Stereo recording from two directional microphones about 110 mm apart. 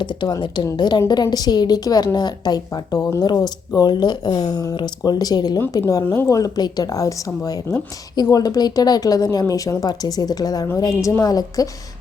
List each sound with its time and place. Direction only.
0.0 s a woman's voice: 40° left (ahead or behind)
5.5 s a woman's voice: 25° left (ahead or behind)